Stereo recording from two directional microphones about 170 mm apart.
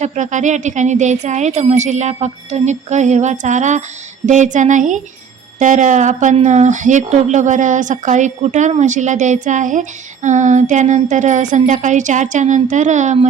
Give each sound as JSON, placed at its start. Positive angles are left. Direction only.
{"t": 0.0, "sound": "speech", "side_deg": -45}